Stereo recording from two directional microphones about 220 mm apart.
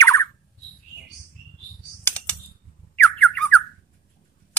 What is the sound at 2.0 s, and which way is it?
Typing, 5° left (ahead or behind).